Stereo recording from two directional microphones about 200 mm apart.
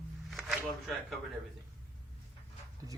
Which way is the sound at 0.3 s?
Centre (ahead or behind).